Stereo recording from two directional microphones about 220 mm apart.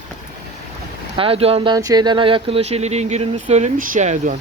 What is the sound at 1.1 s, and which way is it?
Speech, 25° right (ahead or behind).